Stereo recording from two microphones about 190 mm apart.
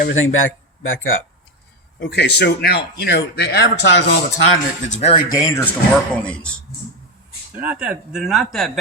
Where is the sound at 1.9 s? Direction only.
65° left (ahead or behind).